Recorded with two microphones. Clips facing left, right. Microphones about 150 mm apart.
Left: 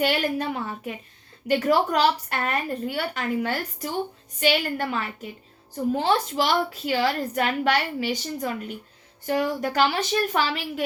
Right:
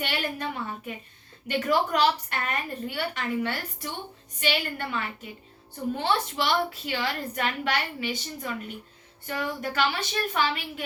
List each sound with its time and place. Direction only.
0.0 s a woman's voice: 45° left (ahead or behind)